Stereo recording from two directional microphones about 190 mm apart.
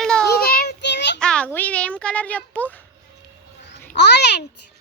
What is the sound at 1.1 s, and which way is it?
Speech, 5° left (ahead or behind).